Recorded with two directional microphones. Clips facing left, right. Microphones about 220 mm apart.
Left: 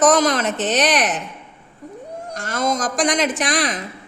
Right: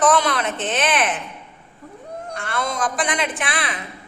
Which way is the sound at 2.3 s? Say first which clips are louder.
Left 4 dB; 40° left (ahead or behind).